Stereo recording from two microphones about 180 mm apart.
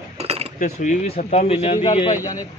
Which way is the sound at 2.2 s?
20° left (ahead or behind).